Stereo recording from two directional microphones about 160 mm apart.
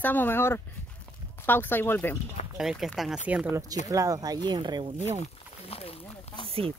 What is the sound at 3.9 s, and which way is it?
Speech, 20° right (ahead or behind).